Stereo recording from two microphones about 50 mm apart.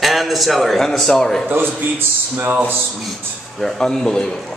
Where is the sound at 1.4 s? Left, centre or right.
Right.